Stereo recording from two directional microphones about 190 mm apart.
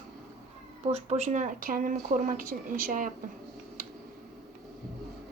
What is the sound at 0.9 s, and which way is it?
Speech, 35° right (ahead or behind).